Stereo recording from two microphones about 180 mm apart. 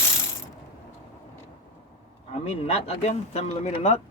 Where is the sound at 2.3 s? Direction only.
35° left (ahead or behind).